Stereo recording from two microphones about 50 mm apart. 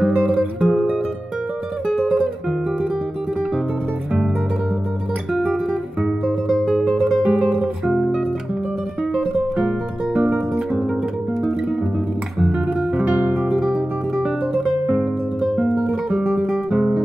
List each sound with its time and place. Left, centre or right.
0.3 s music: centre
6.9 s music: centre
7.2 s guitar: centre
10.1 s music: centre
12.4 s guitar: centre
13.0 s music: right
13.5 s music: centre
14.5 s music: centre
15.4 s guitar: centre